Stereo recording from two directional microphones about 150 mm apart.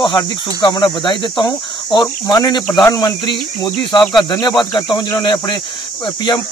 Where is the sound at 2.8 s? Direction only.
25° left (ahead or behind).